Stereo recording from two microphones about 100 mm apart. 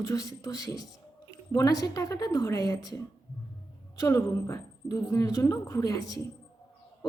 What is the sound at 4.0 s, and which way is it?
A woman's voice, 30° left (ahead or behind).